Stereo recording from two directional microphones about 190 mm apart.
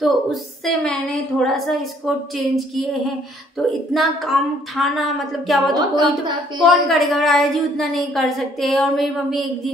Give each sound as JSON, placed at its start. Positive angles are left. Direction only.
{"t": 0.0, "sound": "a woman's voice", "side_deg": 0}
{"t": 5.8, "sound": "a woman's voice", "side_deg": -25}
{"t": 6.6, "sound": "a woman's voice", "side_deg": 0}